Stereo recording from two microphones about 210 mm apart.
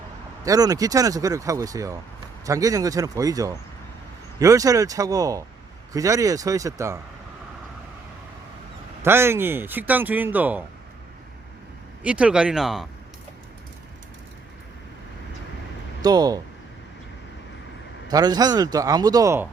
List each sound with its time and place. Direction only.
0.4 s speech: 15° right (ahead or behind)
9.0 s speech: 10° right (ahead or behind)
12.0 s speech: 5° right (ahead or behind)
16.0 s speech: 20° right (ahead or behind)
18.1 s speech: 20° right (ahead or behind)